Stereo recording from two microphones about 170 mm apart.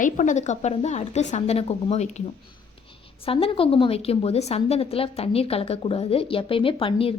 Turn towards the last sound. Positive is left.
turn(degrees=35)  # may be behind; listen again after turning